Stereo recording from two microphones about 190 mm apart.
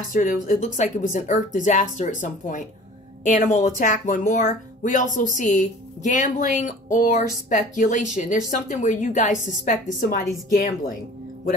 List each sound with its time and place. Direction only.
0.1 s speech: 45° left (ahead or behind)